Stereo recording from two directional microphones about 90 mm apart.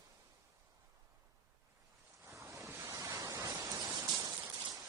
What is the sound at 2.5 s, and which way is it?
Waves, 35° right (ahead or behind).